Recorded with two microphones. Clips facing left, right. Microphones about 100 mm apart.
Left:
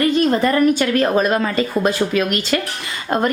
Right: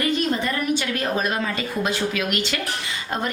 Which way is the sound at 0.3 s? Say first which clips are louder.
Left 8 dB; 50° left (ahead or behind).